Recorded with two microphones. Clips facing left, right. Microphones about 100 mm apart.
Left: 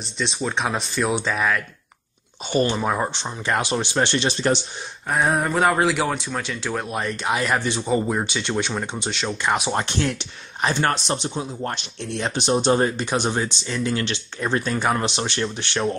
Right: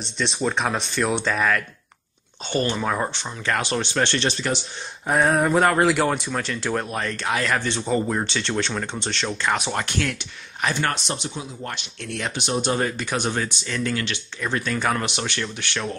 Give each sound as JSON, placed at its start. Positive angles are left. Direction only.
{"t": 0.0, "sound": "speech", "side_deg": 0}
{"t": 2.4, "sound": "speech", "side_deg": 15}
{"t": 5.2, "sound": "speech", "side_deg": 0}
{"t": 9.7, "sound": "speech", "side_deg": 25}